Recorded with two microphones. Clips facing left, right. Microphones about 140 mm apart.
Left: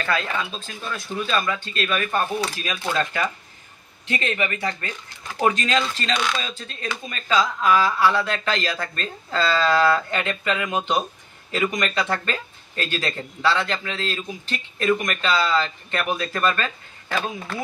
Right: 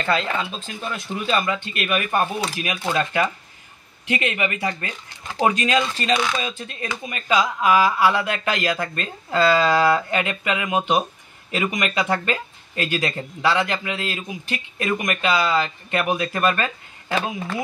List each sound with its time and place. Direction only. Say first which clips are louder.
0.0 s speech: right 2 dB; 25° right (ahead or behind)